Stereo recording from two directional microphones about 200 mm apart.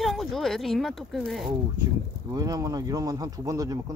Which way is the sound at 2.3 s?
20° right (ahead or behind).